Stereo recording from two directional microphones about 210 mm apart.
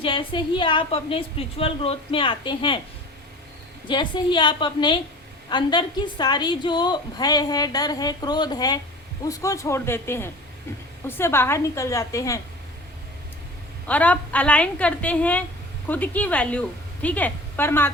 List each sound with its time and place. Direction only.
0.0 s a woman's voice: 25° left (ahead or behind)
3.8 s a woman's voice: 20° left (ahead or behind)
13.8 s a woman's voice: 5° left (ahead or behind)